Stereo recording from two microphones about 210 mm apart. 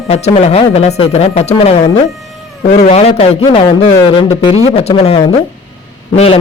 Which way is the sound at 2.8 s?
30° left (ahead or behind).